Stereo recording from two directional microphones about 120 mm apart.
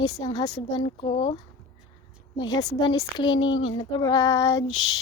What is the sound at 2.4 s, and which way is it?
Speech, 35° left (ahead or behind).